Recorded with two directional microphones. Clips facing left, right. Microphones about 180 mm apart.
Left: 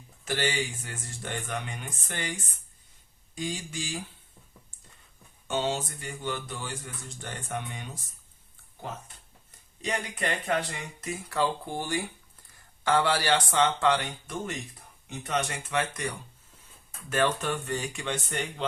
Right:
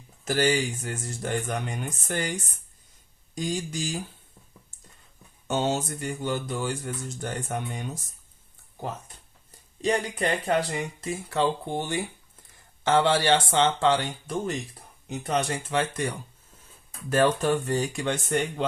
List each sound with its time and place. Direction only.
0.3 s speech: 40° right (ahead or behind)
5.5 s speech: 45° right (ahead or behind)
9.8 s speech: 35° right (ahead or behind)
17.1 s speech: 35° right (ahead or behind)